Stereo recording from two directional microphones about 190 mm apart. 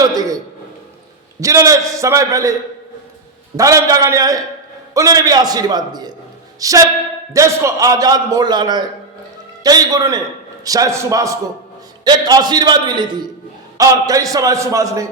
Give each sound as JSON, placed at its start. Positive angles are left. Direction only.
{"t": 0.0, "sound": "a sound", "side_deg": -20}
{"t": 1.4, "sound": "a man's voice", "side_deg": -15}
{"t": 3.6, "sound": "a man's voice", "side_deg": -15}